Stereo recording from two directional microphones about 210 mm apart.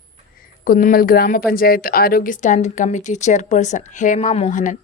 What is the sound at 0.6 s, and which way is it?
A woman's voice, 40° left (ahead or behind).